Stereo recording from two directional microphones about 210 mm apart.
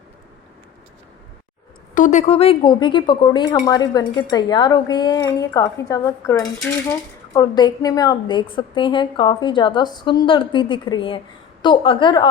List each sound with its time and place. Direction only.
2.0 s a woman's voice: 35° left (ahead or behind)